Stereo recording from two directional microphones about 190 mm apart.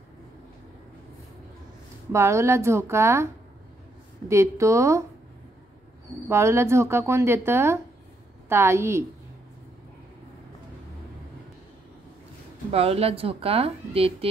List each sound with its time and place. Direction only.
2.1 s speech: 15° right (ahead or behind)
4.3 s speech: 15° right (ahead or behind)
6.2 s speech: 15° right (ahead or behind)
12.7 s speech: 30° right (ahead or behind)